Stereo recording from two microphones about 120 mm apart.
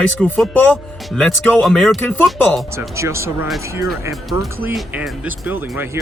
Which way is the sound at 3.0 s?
25° right (ahead or behind).